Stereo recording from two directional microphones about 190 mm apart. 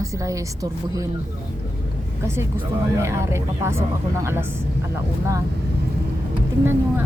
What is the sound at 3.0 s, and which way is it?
Speech, 15° right (ahead or behind).